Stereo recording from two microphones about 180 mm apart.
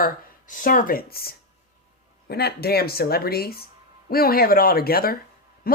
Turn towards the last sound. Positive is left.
turn(degrees=55)  # may be behind; listen again after turning